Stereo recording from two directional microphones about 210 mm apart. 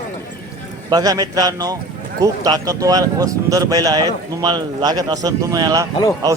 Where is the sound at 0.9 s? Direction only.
20° right (ahead or behind).